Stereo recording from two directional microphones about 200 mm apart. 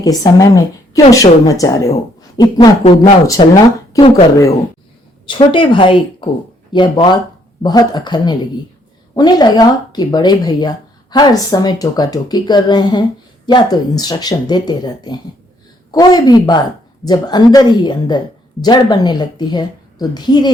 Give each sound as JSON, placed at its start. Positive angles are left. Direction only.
{"t": 0.0, "sound": "a woman's voice", "side_deg": 20}